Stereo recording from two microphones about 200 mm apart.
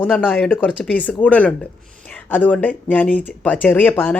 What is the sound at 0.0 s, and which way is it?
Speech, 10° left (ahead or behind).